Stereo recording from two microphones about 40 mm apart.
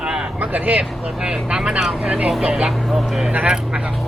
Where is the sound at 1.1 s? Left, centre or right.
Centre.